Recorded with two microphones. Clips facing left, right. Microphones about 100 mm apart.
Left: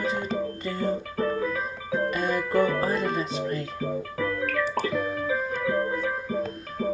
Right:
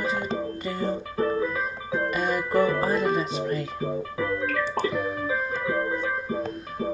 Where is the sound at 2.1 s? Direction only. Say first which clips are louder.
Right 2 dB; 5° right (ahead or behind).